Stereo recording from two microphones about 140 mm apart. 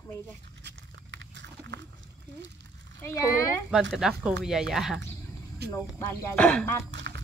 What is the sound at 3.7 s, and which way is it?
Speech, 5° right (ahead or behind).